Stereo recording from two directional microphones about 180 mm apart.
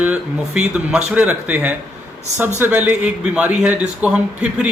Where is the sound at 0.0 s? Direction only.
5° right (ahead or behind).